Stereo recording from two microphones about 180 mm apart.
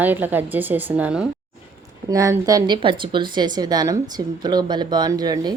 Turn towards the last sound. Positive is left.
turn(degrees=-20)  # may be behind; listen again after turning